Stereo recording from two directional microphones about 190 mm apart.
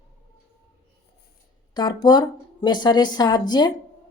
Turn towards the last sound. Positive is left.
turn(degrees=20)  # may be behind; listen again after turning